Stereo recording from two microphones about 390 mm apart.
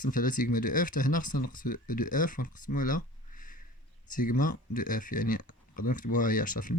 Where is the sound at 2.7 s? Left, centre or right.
Left.